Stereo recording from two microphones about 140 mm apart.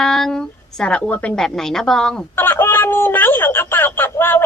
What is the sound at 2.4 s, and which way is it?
Speech, 15° left (ahead or behind).